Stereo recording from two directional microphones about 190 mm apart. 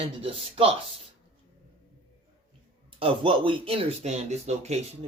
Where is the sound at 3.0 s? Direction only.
25° right (ahead or behind).